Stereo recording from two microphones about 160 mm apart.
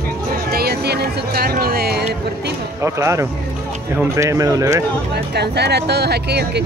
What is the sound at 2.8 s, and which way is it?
Speech, 20° right (ahead or behind).